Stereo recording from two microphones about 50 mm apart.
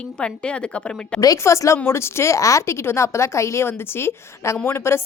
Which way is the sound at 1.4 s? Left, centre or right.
Left.